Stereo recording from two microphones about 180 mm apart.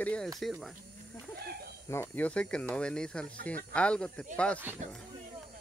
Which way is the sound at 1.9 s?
10° left (ahead or behind).